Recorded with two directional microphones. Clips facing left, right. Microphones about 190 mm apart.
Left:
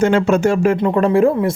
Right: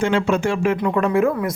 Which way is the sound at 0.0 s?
45° left (ahead or behind).